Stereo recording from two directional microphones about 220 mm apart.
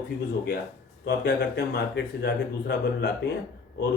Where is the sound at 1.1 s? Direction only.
50° left (ahead or behind).